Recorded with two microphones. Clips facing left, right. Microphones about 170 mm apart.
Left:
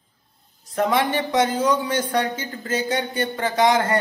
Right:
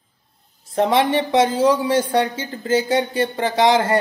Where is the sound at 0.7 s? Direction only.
25° right (ahead or behind).